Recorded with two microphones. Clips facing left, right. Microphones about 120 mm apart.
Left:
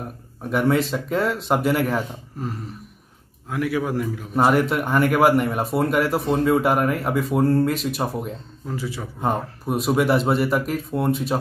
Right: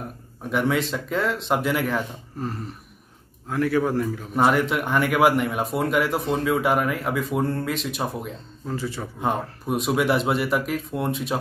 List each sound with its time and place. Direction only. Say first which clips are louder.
0.5 s a man's voice: left 3 dB; centre (ahead or behind)